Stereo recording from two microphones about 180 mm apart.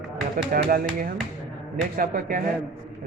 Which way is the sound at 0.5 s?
55° right (ahead or behind).